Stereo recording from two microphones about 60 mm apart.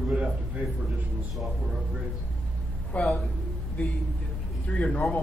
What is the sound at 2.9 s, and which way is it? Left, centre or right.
Speech, left.